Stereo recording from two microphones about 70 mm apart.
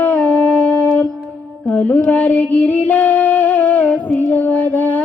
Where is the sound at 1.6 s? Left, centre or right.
Left.